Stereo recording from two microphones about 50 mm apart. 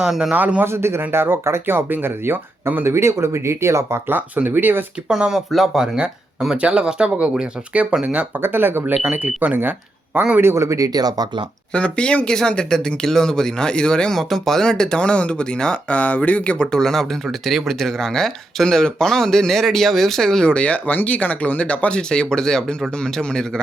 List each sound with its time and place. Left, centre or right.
0.0 s a man's voice: centre
0.3 s speech: right
0.6 s speech: right
2.8 s speech: right
4.4 s speech: right
5.0 s a man's voice: centre
6.6 s speech: right
8.4 s speech: right
9.1 s speech: right
10.4 s speech: right
11.7 s speech: left
14.2 s speech: centre; by 16.6 s left
16.7 s speech: centre
20.5 s speech: left; by 23.5 s centre